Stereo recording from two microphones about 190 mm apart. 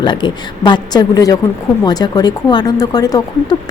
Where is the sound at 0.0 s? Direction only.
25° left (ahead or behind).